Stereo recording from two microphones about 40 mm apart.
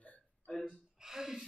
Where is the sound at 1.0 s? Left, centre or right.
Centre.